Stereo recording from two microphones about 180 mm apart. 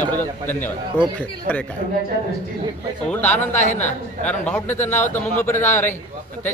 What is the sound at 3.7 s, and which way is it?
Speech, 40° left (ahead or behind).